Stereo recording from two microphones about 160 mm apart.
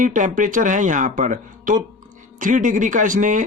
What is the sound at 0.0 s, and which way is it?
Speech, 55° right (ahead or behind).